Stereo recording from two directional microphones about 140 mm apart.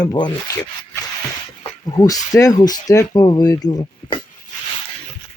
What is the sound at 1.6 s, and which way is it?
Speech, 30° left (ahead or behind).